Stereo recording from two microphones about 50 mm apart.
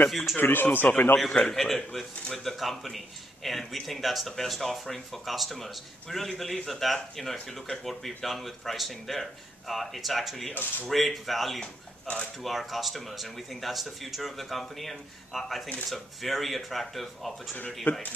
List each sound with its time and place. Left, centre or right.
0.1 s speech: centre
0.4 s speech: left
1.5 s speech: centre
10.5 s speech: left
10.9 s speech: centre
11.6 s speech: left
12.4 s speech: centre
17.9 s speech: left